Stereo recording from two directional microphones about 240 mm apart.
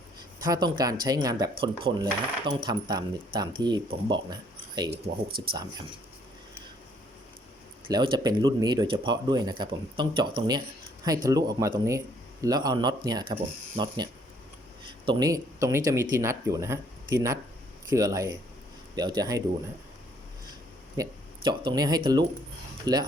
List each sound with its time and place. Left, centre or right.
0.3 s speech: centre
4.9 s speech: right
7.9 s speech: centre
20.9 s speech: centre